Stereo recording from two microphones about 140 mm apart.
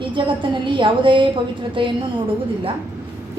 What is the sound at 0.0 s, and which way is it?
A woman's voice, 35° right (ahead or behind).